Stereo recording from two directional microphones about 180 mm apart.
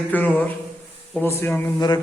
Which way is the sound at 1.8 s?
20° left (ahead or behind).